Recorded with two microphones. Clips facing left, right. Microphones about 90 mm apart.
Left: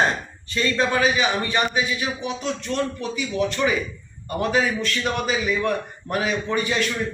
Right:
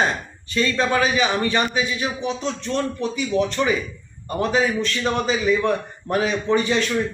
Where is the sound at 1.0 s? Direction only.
35° right (ahead or behind).